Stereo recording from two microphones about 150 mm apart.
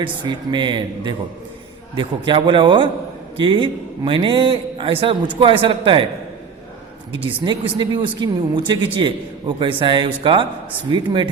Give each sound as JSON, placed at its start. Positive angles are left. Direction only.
{"t": 0.0, "sound": "speech", "side_deg": -30}
{"t": 7.4, "sound": "speech", "side_deg": -30}